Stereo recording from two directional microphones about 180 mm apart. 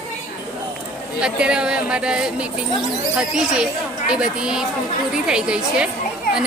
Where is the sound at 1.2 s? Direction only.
5° right (ahead or behind).